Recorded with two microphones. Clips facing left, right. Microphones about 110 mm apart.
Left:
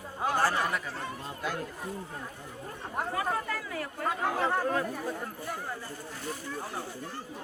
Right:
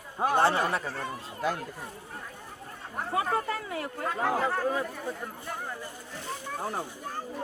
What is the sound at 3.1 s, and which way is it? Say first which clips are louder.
Speech: right 6 dB; 25° right (ahead or behind).